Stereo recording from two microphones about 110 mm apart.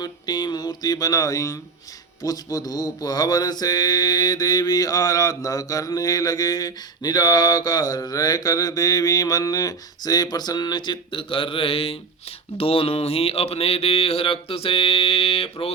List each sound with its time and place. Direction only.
0.0 s music: 40° left (ahead or behind)
2.2 s mantra: 35° left (ahead or behind); by 11.9 s 60° left (ahead or behind)
12.5 s speech: 60° left (ahead or behind)